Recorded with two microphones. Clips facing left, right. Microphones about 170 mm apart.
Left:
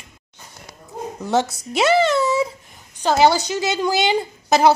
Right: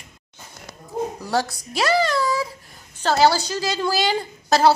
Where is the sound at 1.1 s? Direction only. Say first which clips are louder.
Left 3 dB; 20° left (ahead or behind).